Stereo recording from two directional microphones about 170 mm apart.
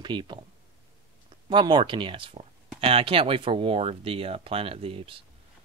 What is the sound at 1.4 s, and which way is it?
Speech, 25° right (ahead or behind).